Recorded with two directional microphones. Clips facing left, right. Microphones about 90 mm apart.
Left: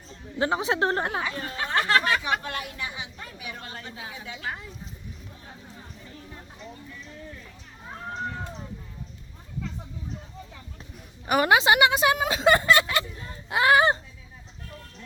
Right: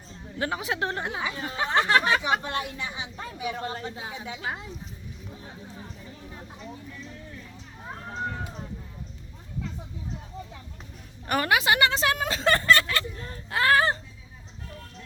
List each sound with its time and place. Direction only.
0.3 s a woman's voice: 25° left (ahead or behind)
0.9 s speech: 50° left (ahead or behind)
1.2 s speech: 20° right (ahead or behind)
11.4 s speech: 25° left (ahead or behind)